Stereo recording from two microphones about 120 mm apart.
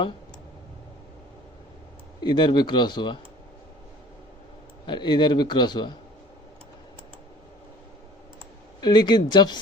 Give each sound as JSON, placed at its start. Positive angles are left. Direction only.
{"t": 2.2, "sound": "a man's voice", "side_deg": 40}
{"t": 4.9, "sound": "a man's voice", "side_deg": 40}
{"t": 8.8, "sound": "a man's voice", "side_deg": 40}